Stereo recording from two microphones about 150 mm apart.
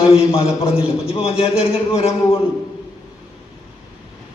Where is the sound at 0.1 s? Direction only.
40° left (ahead or behind).